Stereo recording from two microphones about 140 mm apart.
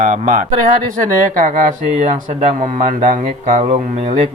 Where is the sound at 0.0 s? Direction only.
75° right (ahead or behind).